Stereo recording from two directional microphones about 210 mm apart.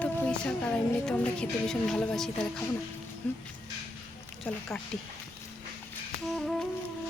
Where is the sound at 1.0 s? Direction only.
5° left (ahead or behind).